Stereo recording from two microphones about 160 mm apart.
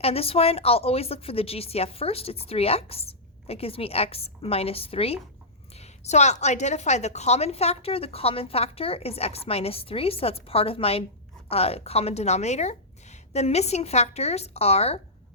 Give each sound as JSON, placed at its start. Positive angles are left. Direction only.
{"t": 0.0, "sound": "a woman's voice", "side_deg": 40}